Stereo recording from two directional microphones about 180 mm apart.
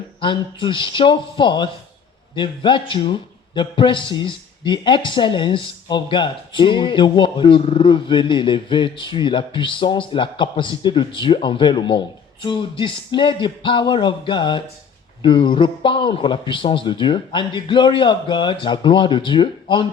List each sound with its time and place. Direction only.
0.2 s a man's voice: 25° left (ahead or behind)